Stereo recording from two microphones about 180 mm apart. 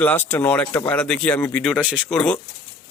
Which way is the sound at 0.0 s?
10° left (ahead or behind).